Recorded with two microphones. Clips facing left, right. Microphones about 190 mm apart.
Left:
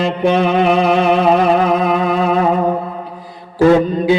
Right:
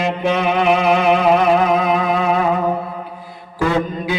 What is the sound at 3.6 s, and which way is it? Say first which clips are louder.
Music: left 8 dB; 35° left (ahead or behind).